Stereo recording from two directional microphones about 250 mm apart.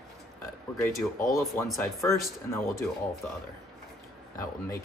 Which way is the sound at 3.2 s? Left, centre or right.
Centre.